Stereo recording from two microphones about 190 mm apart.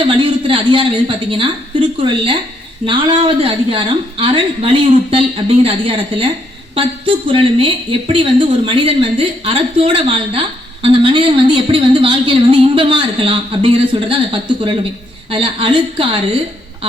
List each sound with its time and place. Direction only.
0.0 s a woman's voice: 25° right (ahead or behind)